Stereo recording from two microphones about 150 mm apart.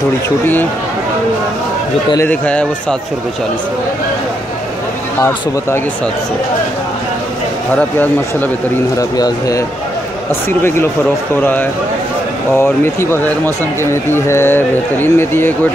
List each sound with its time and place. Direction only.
2.1 s a man's voice: 10° left (ahead or behind)
7.7 s a man's voice: 10° left (ahead or behind)
8.9 s speech: 25° left (ahead or behind)
10.6 s a man's voice: 15° left (ahead or behind)
12.5 s a man's voice: 15° left (ahead or behind)